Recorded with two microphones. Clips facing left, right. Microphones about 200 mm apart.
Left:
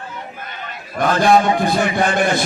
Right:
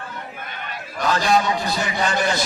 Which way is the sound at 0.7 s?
55° left (ahead or behind).